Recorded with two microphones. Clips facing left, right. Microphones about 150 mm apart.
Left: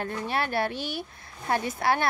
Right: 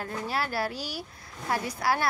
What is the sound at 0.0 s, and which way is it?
A woman's voice, 25° left (ahead or behind).